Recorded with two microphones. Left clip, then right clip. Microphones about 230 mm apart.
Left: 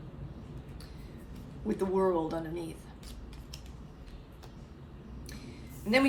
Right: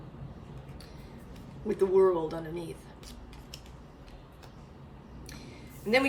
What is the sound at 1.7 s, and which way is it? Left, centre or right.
A woman's voice, left.